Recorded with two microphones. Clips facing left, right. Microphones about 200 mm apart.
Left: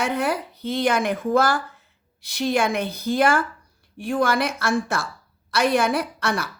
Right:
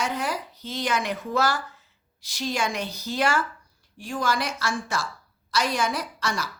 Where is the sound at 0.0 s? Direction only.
60° left (ahead or behind).